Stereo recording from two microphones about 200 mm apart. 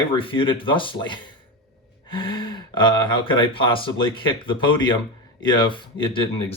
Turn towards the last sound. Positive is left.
turn(degrees=25)  # may be behind; listen again after turning